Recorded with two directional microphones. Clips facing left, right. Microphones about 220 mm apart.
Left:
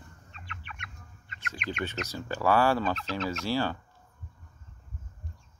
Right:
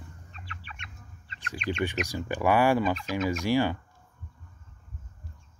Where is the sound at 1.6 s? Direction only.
30° right (ahead or behind).